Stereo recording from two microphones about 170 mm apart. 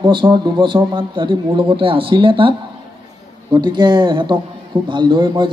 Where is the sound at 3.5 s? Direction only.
25° right (ahead or behind).